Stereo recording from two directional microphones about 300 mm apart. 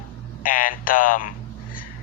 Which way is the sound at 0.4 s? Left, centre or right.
Left.